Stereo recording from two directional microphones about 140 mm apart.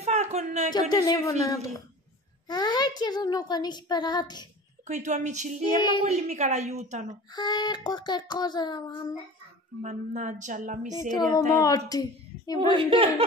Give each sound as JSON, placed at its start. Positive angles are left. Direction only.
{"t": 0.0, "sound": "a sound", "side_deg": -50}
{"t": 0.7, "sound": "a woman's voice", "side_deg": 30}
{"t": 2.4, "sound": "a woman's voice", "side_deg": 30}
{"t": 4.8, "sound": "a woman's voice", "side_deg": -60}
{"t": 7.3, "sound": "a woman's voice", "side_deg": 30}
{"t": 9.8, "sound": "speech", "side_deg": -60}
{"t": 11.0, "sound": "a woman's voice", "side_deg": 30}
{"t": 12.7, "sound": "a woman's voice", "side_deg": -40}